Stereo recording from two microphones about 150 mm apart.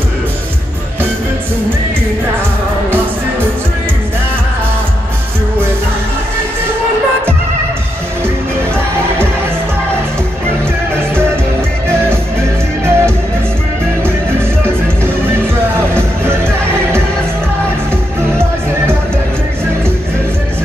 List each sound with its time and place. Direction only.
12.0 s music: 15° right (ahead or behind)